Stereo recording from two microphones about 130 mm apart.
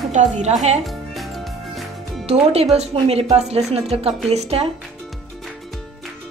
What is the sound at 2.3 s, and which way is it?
A woman's voice, 50° right (ahead or behind).